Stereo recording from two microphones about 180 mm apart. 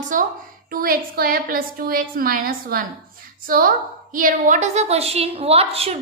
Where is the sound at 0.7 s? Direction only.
55° right (ahead or behind).